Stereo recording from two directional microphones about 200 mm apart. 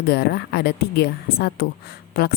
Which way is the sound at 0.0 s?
50° left (ahead or behind).